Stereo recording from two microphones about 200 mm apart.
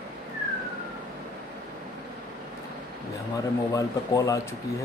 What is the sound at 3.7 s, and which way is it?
Speech, 15° left (ahead or behind).